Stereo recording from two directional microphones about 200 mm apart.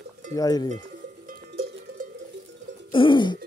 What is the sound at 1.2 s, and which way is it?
Cowbell, 45° right (ahead or behind).